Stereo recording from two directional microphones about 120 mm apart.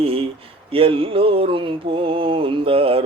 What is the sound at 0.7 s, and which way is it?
Mantra, 50° right (ahead or behind).